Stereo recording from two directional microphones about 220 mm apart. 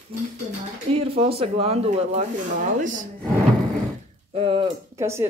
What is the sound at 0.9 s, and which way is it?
A woman's voice, 25° right (ahead or behind).